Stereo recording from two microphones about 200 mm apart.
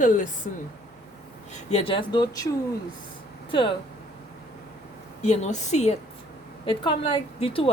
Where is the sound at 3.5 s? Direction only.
25° left (ahead or behind).